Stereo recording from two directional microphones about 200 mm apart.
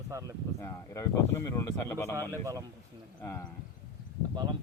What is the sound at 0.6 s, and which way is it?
Speech, 15° left (ahead or behind).